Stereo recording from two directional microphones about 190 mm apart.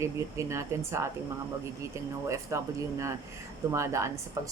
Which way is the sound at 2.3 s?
15° right (ahead or behind).